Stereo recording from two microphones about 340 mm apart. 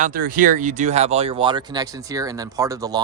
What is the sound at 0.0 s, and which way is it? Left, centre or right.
Speech, right.